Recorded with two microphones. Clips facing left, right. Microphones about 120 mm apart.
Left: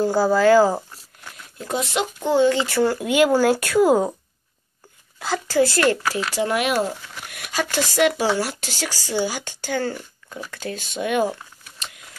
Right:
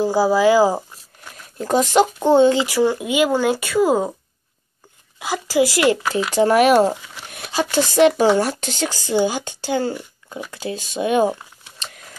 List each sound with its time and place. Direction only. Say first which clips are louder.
0.0 s speech: right 1 dB; 5° right (ahead or behind)
1.6 s speech: right 8 dB; 40° right (ahead or behind)
2.2 s speech: right 2 dB; 25° right (ahead or behind)
2.7 s speech: right 1 dB; centre (ahead or behind)
5.2 s speech: right 1 dB; 10° right (ahead or behind)
6.4 s speech: right 9 dB; 40° right (ahead or behind)
7.2 s a sound: right 2 dB; 30° right (ahead or behind)
7.5 s speech: right 5 dB; 20° right (ahead or behind)